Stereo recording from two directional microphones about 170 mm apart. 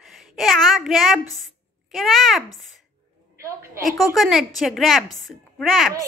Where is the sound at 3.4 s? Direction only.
15° right (ahead or behind).